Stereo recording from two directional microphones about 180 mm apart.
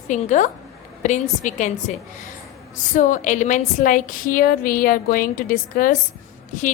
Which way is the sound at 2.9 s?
45° left (ahead or behind).